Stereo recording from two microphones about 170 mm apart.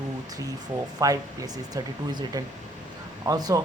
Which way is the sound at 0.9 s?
20° right (ahead or behind).